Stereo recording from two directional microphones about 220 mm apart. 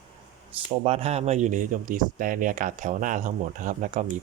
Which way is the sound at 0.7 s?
25° right (ahead or behind).